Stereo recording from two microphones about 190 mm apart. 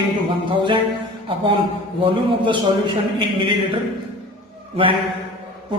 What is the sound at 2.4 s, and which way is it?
Speech, 25° right (ahead or behind).